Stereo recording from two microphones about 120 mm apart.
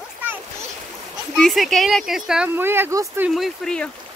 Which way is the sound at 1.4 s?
Centre (ahead or behind).